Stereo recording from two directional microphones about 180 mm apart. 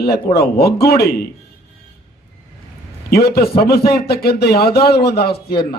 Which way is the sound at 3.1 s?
60° left (ahead or behind).